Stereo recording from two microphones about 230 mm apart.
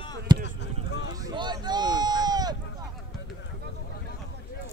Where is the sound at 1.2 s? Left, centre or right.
Centre.